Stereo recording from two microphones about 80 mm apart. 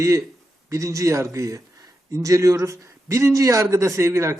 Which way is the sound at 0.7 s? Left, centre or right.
Right.